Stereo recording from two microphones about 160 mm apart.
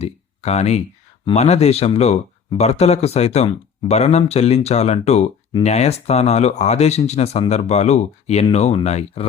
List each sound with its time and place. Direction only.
0.0 s speech: 40° left (ahead or behind)